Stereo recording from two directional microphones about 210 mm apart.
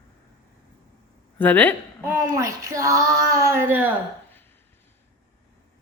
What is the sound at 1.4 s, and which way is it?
Speech, 10° left (ahead or behind).